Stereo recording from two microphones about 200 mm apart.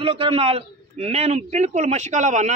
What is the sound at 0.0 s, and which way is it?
A man's voice, 25° right (ahead or behind).